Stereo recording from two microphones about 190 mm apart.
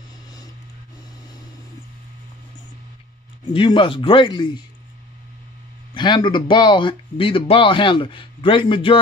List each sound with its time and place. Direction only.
3.5 s speech: 25° left (ahead or behind)
5.9 s speech: 25° left (ahead or behind)